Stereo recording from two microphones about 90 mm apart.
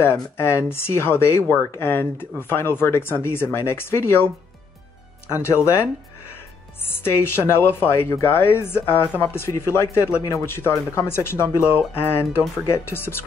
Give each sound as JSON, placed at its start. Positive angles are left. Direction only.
{"t": 0.0, "sound": "speech", "side_deg": 25}
{"t": 5.3, "sound": "speech", "side_deg": 30}